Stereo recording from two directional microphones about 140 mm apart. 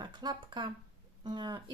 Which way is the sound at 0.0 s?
30° right (ahead or behind).